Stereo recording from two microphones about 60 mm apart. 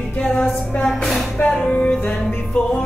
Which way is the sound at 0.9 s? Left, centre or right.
Centre.